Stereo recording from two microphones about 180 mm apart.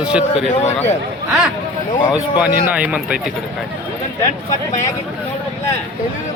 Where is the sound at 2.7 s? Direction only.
5° right (ahead or behind).